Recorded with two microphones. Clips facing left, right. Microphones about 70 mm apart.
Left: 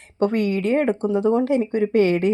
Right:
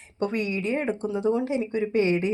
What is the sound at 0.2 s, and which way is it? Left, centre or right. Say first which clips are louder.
A woman's voice: left 7 dB; left.